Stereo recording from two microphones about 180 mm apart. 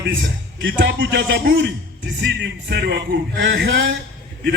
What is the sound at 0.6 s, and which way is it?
A man's voice, 90° right.